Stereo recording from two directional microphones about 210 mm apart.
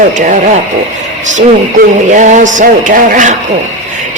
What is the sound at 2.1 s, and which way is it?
Speech, 35° right (ahead or behind).